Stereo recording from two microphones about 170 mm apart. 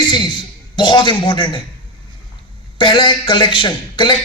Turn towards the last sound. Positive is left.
turn(degrees=30)  # may be behind; listen again after turning